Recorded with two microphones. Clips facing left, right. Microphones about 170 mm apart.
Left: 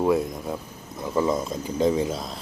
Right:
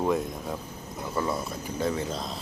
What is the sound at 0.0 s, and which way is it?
Speech, 5° left (ahead or behind).